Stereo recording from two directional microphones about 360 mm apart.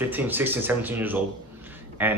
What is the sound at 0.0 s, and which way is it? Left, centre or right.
Speech, centre.